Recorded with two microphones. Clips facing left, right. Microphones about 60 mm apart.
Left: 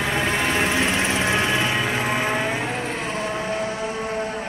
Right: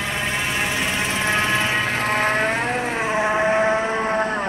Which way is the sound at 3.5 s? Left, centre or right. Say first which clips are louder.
Right 7 dB; right.